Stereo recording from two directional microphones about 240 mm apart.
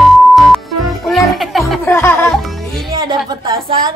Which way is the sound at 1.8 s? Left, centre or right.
Centre.